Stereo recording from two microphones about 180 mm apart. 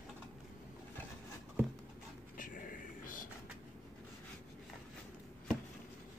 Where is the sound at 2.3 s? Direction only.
50° left (ahead or behind).